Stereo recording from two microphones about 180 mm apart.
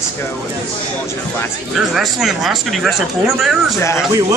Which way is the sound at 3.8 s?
15° left (ahead or behind).